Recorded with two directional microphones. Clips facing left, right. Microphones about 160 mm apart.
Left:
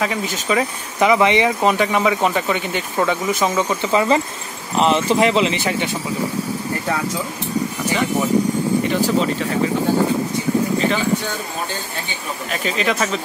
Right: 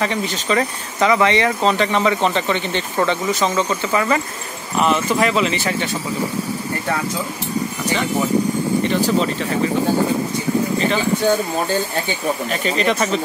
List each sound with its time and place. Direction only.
0.0 s speech: 5° left (ahead or behind)
12.4 s speech: centre (ahead or behind)